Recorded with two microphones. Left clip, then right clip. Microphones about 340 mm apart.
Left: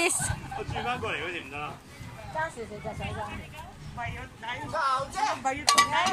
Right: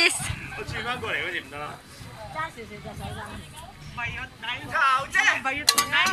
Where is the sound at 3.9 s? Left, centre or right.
Left.